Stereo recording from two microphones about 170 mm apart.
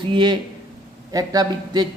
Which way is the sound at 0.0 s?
30° right (ahead or behind).